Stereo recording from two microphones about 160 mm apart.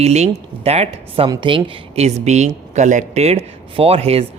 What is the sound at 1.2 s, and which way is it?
Speech, 30° right (ahead or behind).